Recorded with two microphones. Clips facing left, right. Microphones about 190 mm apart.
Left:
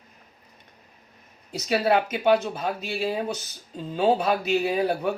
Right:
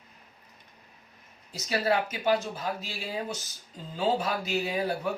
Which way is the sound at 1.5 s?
65° left (ahead or behind).